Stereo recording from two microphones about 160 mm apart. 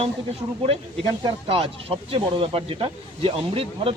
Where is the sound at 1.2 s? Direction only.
35° right (ahead or behind).